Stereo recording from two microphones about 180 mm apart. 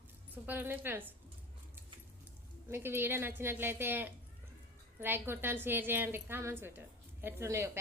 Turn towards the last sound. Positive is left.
turn(degrees=-15)  # may be behind; listen again after turning